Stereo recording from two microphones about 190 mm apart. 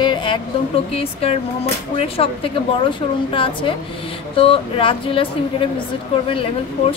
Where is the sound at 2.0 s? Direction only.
30° left (ahead or behind).